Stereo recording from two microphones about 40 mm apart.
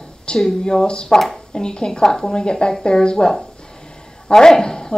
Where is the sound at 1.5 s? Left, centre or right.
Centre.